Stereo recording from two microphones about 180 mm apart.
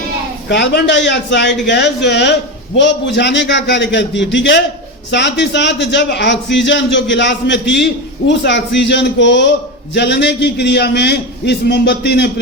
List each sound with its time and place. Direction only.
0.4 s a man's voice: 70° left (ahead or behind)